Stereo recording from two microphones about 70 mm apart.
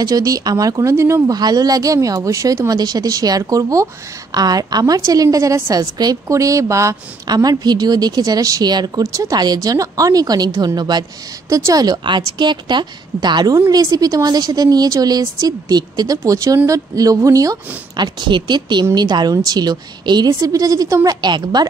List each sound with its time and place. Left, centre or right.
0.0 s a woman's voice: right
1.2 s a woman's voice: right
2.8 s a woman's voice: right
4.3 s a woman's voice: right
6.2 s speech: right
7.2 s a woman's voice: right
9.0 s a woman's voice: right
10.8 s a woman's voice: right
11.4 s a woman's voice: right
13.7 s a woman's voice: right
16.3 s speech: right
17.9 s a woman's voice: right
21.2 s a woman's voice: right